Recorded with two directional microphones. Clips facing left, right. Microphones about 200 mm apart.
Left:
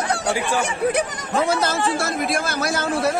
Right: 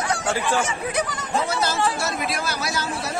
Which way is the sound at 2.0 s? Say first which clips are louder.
Left 4 dB; 50° left (ahead or behind).